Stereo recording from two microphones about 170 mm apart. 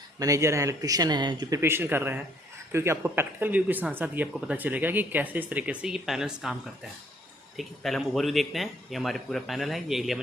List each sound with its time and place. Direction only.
0.2 s speech: 20° right (ahead or behind); by 10.2 s centre (ahead or behind)